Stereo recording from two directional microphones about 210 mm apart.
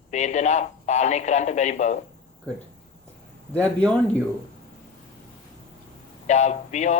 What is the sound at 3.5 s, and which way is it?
Speech, 5° left (ahead or behind).